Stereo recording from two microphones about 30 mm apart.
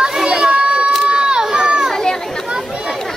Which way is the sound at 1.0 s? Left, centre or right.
Right.